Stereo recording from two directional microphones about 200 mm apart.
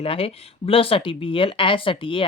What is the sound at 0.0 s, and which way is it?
Speech, 30° left (ahead or behind).